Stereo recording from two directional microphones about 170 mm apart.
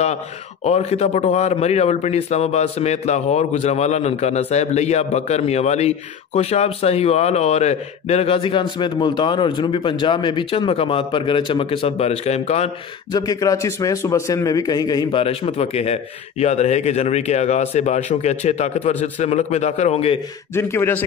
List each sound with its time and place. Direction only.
0.7 s a man's voice: 40° left (ahead or behind)
13.1 s a man's voice: 20° left (ahead or behind)
20.5 s a man's voice: 15° left (ahead or behind)